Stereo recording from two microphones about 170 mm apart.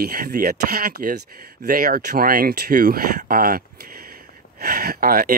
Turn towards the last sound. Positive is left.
turn(degrees=-60)  # may be behind; listen again after turning